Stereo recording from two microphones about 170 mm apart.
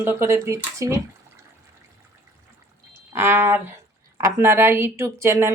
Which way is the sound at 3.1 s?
15° right (ahead or behind).